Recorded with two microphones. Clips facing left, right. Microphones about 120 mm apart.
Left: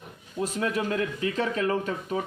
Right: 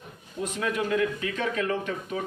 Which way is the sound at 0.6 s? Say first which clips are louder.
Right 2 dB; 35° left (ahead or behind).